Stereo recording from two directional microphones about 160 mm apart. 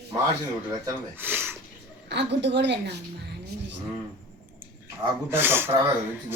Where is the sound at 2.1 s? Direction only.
90° right.